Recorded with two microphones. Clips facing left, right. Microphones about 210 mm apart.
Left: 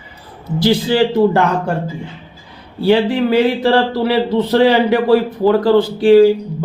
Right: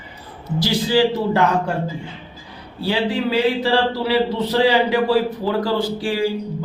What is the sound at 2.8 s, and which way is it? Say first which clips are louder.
Speech: left 7 dB; 55° left (ahead or behind).